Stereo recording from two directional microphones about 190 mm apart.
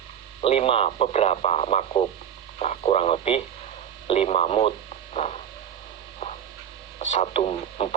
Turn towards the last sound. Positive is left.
turn(degrees=30)  # may be behind; listen again after turning